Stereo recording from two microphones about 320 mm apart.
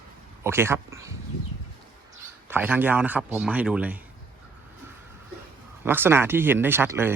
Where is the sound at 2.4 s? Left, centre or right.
Centre.